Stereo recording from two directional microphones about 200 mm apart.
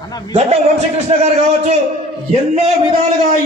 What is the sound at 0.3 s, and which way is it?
Speech, 30° right (ahead or behind).